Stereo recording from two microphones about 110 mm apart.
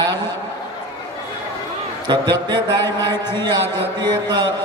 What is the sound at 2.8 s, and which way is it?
Speech, 20° left (ahead or behind).